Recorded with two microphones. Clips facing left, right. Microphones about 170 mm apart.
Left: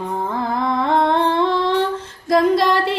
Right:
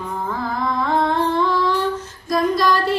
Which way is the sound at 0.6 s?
20° left (ahead or behind).